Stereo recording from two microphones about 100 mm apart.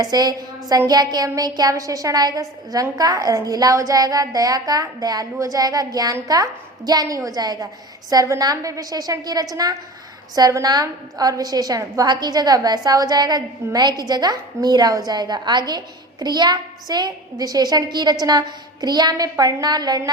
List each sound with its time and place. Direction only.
0.0 s a woman's voice: 40° right (ahead or behind)